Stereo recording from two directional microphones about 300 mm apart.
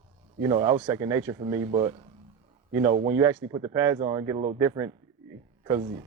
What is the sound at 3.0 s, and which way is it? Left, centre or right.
Speech, centre.